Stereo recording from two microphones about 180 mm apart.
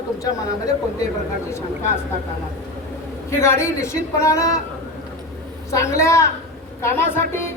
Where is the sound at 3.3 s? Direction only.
15° left (ahead or behind).